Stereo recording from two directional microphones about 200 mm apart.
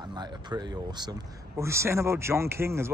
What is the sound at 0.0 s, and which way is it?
Speech, 20° right (ahead or behind).